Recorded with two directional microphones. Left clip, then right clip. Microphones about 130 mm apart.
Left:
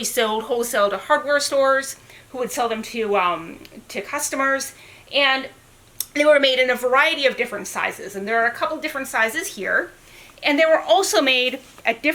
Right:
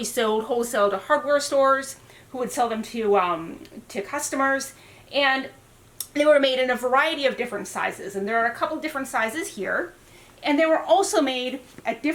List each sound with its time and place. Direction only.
0.0 s a woman's voice: 5° left (ahead or behind); by 12.1 s 20° left (ahead or behind)